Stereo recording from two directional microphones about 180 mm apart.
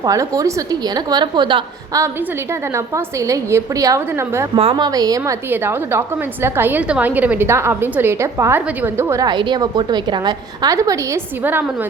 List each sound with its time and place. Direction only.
0.0 s a woman's voice: 20° right (ahead or behind)
4.5 s a woman's voice: 30° right (ahead or behind); by 11.9 s 10° right (ahead or behind)